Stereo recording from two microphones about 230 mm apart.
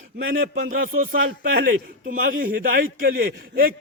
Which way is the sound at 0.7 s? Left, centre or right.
Right.